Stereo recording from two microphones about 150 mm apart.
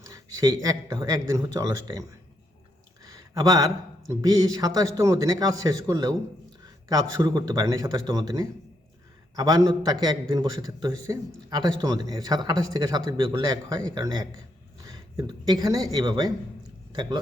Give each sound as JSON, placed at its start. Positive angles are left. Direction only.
{"t": 0.1, "sound": "a man's voice", "side_deg": -25}
{"t": 3.0, "sound": "a sound", "side_deg": -25}
{"t": 4.1, "sound": "a man's voice", "side_deg": -25}